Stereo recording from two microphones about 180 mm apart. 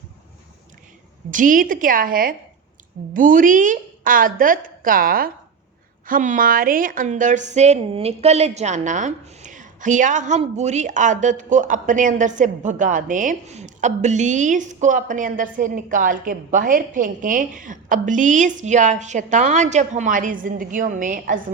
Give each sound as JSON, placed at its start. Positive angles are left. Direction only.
{"t": 1.3, "sound": "a woman's voice", "side_deg": -50}